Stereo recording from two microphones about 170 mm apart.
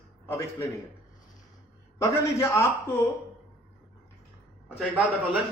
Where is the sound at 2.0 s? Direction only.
15° left (ahead or behind).